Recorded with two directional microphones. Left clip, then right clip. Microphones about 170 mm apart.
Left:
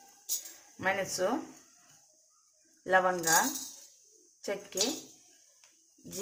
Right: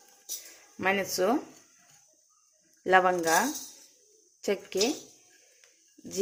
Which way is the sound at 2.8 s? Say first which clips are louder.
Right 4 dB; 40° right (ahead or behind).